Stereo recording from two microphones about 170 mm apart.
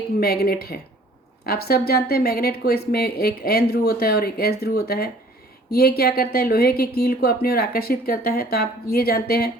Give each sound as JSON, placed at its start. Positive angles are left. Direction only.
{"t": 0.2, "sound": "speech", "side_deg": 65}